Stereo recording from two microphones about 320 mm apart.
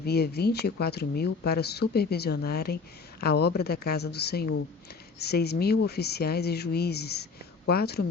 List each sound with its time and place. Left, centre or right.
0.0 s speech: left